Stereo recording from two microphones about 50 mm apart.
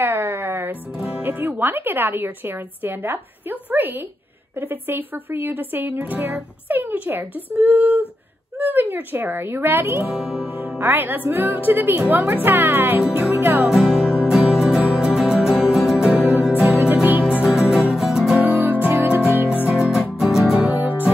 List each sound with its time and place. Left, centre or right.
0.0 s music: right
0.9 s music: right
1.2 s a woman's voice: right
10.1 s music: centre
10.8 s a woman's voice: right
13.3 s music: right
13.7 s music: centre
16.1 s music: right
17.2 s music: right
17.5 s music: centre
18.4 s music: right
19.7 s music: centre
20.6 s music: right